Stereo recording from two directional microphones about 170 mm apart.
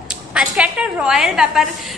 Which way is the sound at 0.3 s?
5° right (ahead or behind).